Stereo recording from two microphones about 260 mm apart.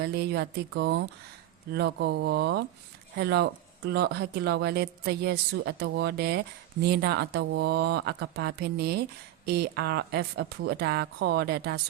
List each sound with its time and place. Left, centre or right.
0.0 s speech: right